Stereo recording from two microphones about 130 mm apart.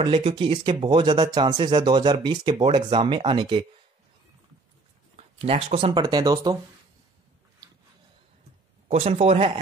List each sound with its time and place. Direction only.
0.0 s speech: 40° right (ahead or behind)
5.1 s a sound: 50° right (ahead or behind)
5.8 s speech: 40° right (ahead or behind)
8.9 s speech: 50° right (ahead or behind)